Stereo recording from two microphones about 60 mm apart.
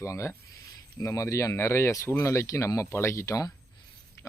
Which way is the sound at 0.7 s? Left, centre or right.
Left.